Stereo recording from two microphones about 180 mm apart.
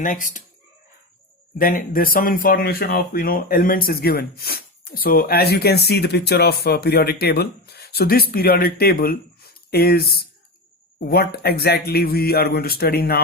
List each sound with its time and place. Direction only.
0.0 s speech: 45° left (ahead or behind)
1.5 s speech: 50° left (ahead or behind)